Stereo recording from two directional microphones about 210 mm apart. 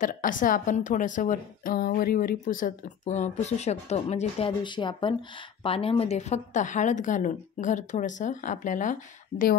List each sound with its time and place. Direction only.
0.0 s a woman's voice: 40° left (ahead or behind)